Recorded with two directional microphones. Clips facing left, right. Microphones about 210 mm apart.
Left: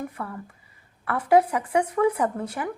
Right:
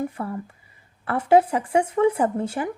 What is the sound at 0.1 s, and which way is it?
Speech, 25° right (ahead or behind).